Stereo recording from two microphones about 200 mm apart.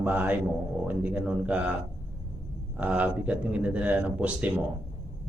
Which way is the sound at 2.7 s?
5° right (ahead or behind).